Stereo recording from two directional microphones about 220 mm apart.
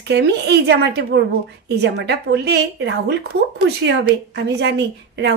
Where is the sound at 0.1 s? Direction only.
50° right (ahead or behind).